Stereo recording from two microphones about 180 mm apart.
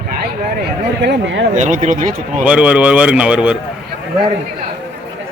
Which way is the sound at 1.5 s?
45° right (ahead or behind).